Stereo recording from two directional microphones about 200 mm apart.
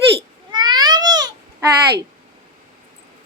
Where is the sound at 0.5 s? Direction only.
20° right (ahead or behind).